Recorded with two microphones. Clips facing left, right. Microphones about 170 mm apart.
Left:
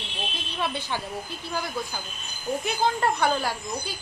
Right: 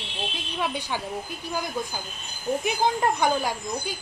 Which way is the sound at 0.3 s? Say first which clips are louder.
Right 1 dB; 15° right (ahead or behind).